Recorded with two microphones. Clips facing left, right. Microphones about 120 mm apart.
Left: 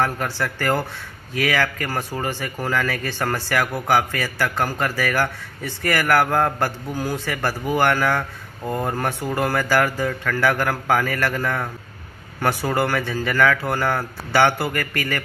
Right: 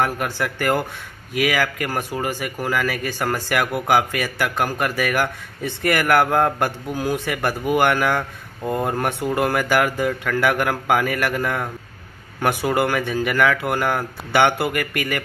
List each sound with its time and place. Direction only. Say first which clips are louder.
0.0 s speech: right 1 dB; 15° right (ahead or behind)